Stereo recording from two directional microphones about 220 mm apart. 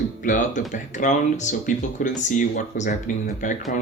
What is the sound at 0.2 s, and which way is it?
Speech, 35° left (ahead or behind).